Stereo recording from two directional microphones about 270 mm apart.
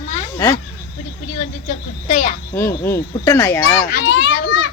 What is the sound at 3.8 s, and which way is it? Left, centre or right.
Speech, left.